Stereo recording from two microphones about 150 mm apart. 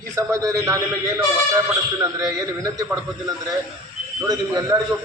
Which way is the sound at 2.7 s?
25° right (ahead or behind).